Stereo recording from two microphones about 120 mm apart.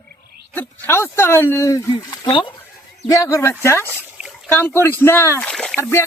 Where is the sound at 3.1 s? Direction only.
25° left (ahead or behind).